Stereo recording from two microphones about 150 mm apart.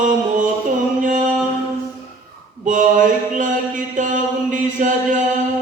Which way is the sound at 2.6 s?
60° right (ahead or behind).